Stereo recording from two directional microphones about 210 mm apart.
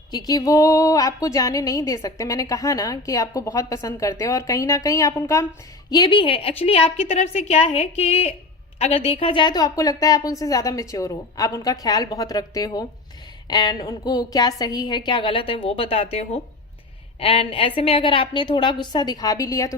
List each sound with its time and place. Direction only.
0.1 s a woman's voice: 20° left (ahead or behind)